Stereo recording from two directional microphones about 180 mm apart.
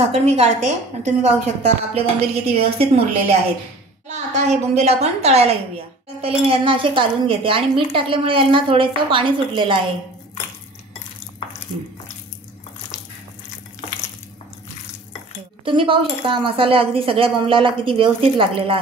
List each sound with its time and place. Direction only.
0.0 s a woman's voice: 35° right (ahead or behind)
15.6 s speech: 30° right (ahead or behind)